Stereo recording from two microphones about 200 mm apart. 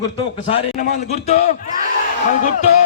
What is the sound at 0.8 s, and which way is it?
A man's voice, 35° left (ahead or behind).